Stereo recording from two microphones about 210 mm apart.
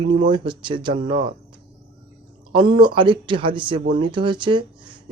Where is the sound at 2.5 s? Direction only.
25° right (ahead or behind).